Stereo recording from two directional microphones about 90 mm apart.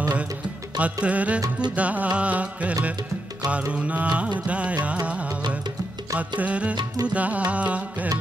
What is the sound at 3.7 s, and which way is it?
Music, 15° right (ahead or behind).